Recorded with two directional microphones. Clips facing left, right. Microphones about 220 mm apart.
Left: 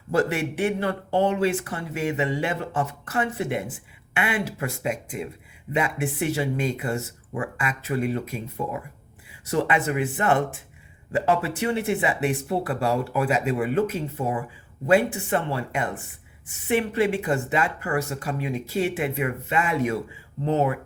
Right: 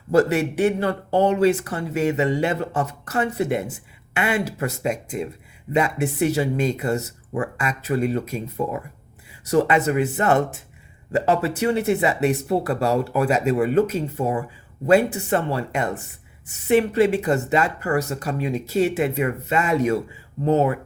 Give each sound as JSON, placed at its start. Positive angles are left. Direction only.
{"t": 0.1, "sound": "speech", "side_deg": -40}